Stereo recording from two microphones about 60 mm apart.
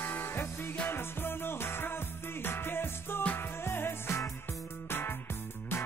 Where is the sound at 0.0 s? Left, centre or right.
Left.